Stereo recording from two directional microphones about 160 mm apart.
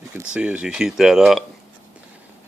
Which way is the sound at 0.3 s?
5° right (ahead or behind).